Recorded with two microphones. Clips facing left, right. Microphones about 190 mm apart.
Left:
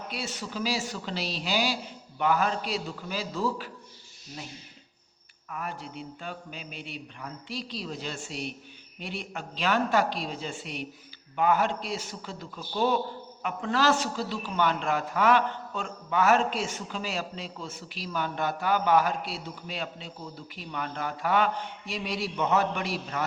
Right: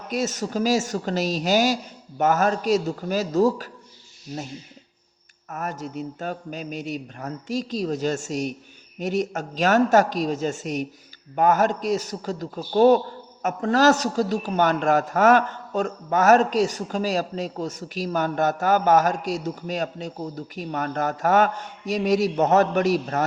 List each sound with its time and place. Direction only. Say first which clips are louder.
0.1 s a man's voice: right 13 dB; 45° right (ahead or behind)
5.5 s a man's voice: right 6 dB; 45° right (ahead or behind)